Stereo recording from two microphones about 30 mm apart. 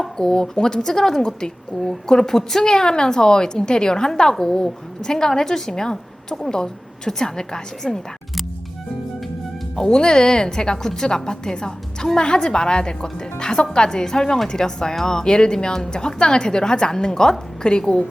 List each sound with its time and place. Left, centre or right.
0.2 s a woman's voice: left
9.7 s a woman's voice: left
13.4 s music: left
13.7 s a woman's voice: left